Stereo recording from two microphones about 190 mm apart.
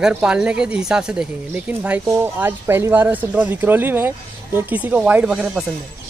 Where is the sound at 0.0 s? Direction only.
5° right (ahead or behind).